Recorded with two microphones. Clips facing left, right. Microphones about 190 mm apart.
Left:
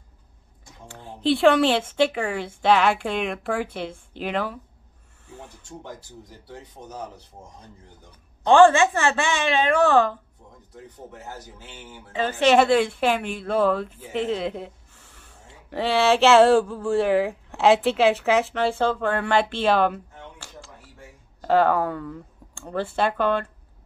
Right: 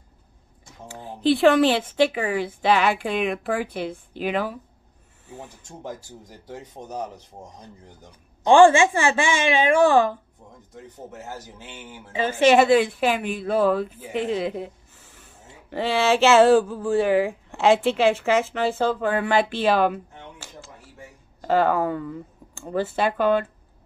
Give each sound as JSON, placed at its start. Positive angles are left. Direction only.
{"t": 0.8, "sound": "speech", "side_deg": -5}
{"t": 6.4, "sound": "speech", "side_deg": -40}
{"t": 8.5, "sound": "a woman's voice", "side_deg": -10}
{"t": 12.1, "sound": "speech", "side_deg": -5}
{"t": 15.7, "sound": "speech", "side_deg": 0}